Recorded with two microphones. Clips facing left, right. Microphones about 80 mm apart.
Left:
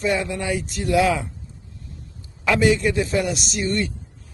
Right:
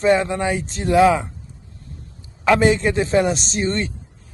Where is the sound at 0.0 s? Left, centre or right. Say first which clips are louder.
Right 6 dB; right.